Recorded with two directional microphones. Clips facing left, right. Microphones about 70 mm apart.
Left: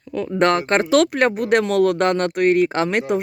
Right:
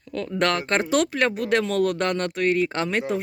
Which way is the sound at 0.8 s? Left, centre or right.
Left.